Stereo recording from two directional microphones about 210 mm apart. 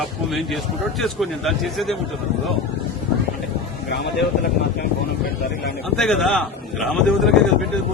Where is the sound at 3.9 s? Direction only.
55° left (ahead or behind).